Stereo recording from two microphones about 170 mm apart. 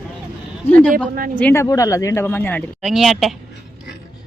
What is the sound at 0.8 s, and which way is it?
Speech, 5° left (ahead or behind).